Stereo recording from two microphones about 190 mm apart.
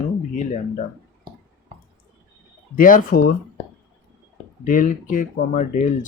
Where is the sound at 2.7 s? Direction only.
45° left (ahead or behind).